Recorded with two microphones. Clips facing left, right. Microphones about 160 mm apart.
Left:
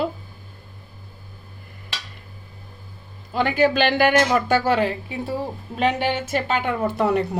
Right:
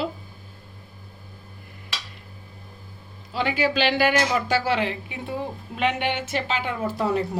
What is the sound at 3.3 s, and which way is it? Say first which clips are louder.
A woman's voice: left 5 dB; 50° left (ahead or behind).